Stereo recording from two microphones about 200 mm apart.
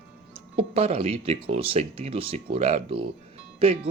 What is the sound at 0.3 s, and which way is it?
Speech, 30° right (ahead or behind).